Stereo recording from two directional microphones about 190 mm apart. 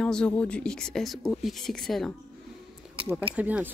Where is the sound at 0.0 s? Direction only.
5° left (ahead or behind).